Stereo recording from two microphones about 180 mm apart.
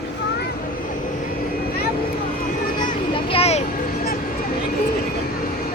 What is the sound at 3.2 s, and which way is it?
Vehicle, 35° left (ahead or behind).